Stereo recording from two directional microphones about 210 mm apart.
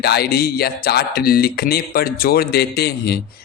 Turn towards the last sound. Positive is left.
turn(degrees=50)  # may be behind; listen again after turning